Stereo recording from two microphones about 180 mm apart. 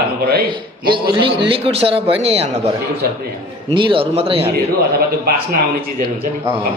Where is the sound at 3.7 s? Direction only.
30° right (ahead or behind).